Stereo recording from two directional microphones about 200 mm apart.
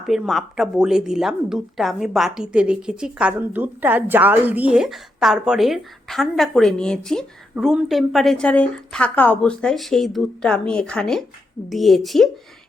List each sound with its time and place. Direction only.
0.0 s speech: centre (ahead or behind)